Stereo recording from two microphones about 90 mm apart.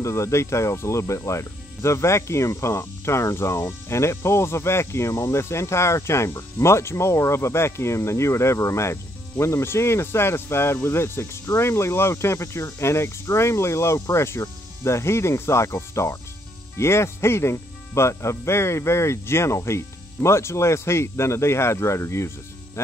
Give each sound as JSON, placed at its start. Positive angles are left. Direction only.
{"t": 0.0, "sound": "speech", "side_deg": 30}